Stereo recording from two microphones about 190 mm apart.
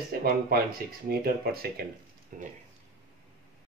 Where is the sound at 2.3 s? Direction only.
45° right (ahead or behind).